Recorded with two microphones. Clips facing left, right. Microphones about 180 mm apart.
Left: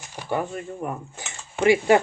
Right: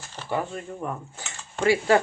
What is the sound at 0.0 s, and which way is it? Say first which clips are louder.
Speech: left 2 dB; 15° left (ahead or behind).